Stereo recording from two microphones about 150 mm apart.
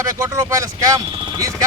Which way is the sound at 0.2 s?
20° right (ahead or behind).